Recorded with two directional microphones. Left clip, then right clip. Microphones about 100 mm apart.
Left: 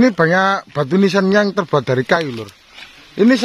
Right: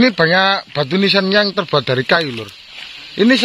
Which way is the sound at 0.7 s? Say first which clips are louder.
Right 1 dB; 55° left (ahead or behind).